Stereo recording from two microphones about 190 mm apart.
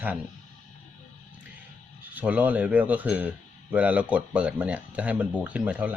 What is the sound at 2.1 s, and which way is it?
Speech, 5° right (ahead or behind).